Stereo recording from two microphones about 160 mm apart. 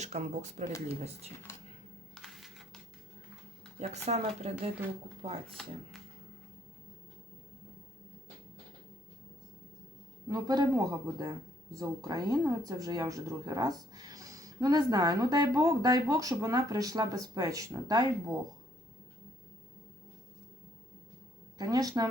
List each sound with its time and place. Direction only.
0.0 s speech: 45° right (ahead or behind)
2.1 s a sound: centre (ahead or behind)
3.8 s speech: 45° right (ahead or behind)
10.2 s speech: 25° right (ahead or behind)
21.6 s speech: 25° right (ahead or behind)